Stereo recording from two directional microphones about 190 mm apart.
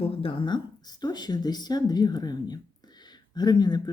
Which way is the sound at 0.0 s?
30° left (ahead or behind).